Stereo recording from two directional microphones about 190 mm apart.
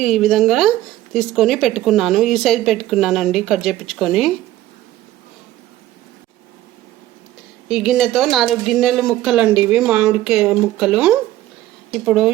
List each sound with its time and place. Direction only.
0.0 s speech: centre (ahead or behind)
7.7 s speech: centre (ahead or behind)